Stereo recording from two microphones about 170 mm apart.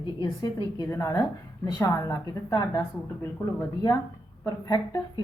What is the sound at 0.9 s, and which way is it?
A woman's voice, 15° left (ahead or behind).